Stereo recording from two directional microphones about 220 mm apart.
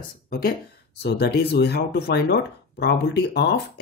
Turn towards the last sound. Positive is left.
turn(degrees=50)  # may be behind; listen again after turning